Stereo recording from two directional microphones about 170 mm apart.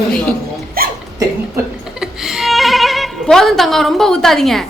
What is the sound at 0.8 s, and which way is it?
Hiccup, 60° right (ahead or behind).